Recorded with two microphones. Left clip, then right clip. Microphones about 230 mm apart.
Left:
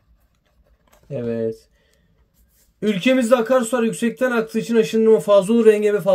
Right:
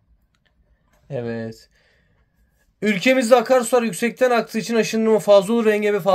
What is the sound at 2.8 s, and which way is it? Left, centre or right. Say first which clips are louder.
A man's voice: right 1 dB; centre.